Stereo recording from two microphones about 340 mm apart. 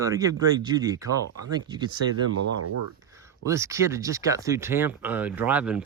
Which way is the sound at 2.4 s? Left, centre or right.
Right.